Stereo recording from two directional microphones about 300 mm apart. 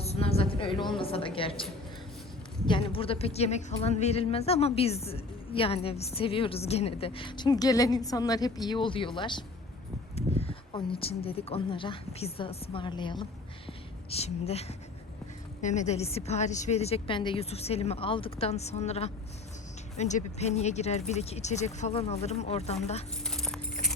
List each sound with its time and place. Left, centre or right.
0.0 s a sound: centre
2.6 s a woman's voice: centre
10.4 s a woman's voice: centre
23.2 s keys jangling: centre